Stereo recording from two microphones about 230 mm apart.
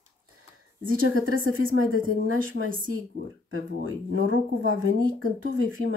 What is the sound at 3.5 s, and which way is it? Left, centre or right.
Speech, right.